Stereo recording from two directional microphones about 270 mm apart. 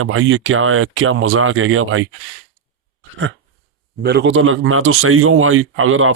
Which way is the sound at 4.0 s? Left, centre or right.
Right.